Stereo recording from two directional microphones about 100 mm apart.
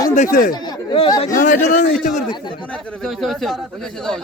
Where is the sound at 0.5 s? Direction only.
45° left (ahead or behind).